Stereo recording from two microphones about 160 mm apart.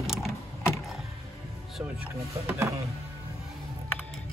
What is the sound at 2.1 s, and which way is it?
Speech, 15° right (ahead or behind).